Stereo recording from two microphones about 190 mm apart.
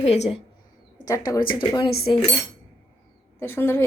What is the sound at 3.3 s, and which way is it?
Speech, 10° left (ahead or behind).